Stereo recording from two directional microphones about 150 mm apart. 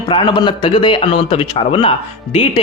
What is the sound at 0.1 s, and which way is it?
A man's voice, 30° left (ahead or behind).